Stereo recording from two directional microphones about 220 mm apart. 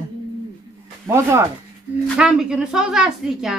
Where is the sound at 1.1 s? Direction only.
10° right (ahead or behind).